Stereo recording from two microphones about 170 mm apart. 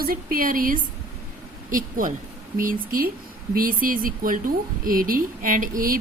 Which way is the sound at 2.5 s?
55° right (ahead or behind).